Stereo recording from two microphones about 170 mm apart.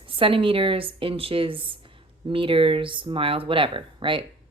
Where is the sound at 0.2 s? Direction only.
30° right (ahead or behind).